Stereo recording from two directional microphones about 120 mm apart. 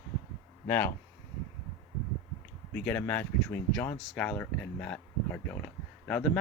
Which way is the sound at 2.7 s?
15° left (ahead or behind).